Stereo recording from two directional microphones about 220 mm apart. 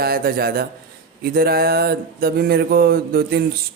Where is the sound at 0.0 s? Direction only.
45° right (ahead or behind).